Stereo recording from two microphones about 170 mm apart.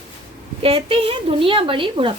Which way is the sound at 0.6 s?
35° right (ahead or behind).